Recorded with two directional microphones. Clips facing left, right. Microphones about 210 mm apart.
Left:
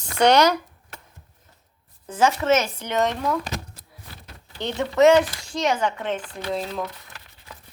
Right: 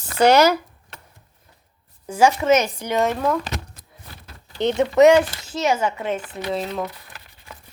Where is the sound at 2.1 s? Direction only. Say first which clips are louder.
Right 3 dB; 10° right (ahead or behind).